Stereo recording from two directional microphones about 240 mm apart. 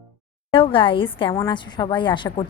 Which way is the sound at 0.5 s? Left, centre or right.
Left.